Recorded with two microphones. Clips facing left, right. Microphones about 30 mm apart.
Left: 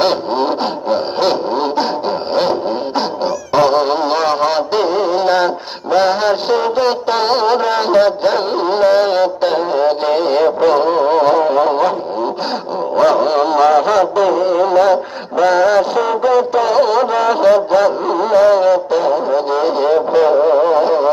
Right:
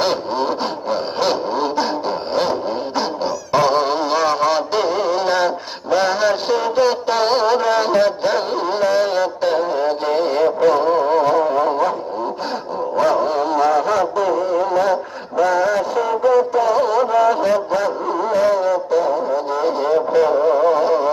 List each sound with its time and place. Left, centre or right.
0.0 s vehicle: left
0.9 s vehicle: left
5.9 s music: left
13.0 s a sound: left
15.4 s music: left
20.5 s a sound: left